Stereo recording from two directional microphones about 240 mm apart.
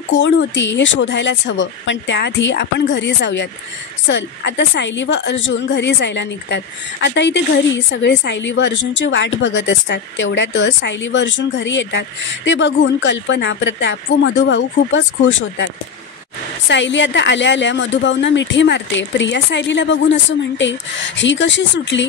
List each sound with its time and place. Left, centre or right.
0.1 s a woman's voice: left
16.6 s a woman's voice: left